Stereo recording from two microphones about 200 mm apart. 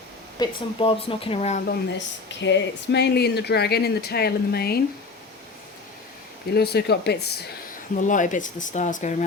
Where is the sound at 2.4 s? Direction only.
60° left (ahead or behind).